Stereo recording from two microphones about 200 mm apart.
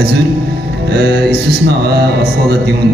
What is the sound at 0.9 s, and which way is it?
Speech, 55° right (ahead or behind).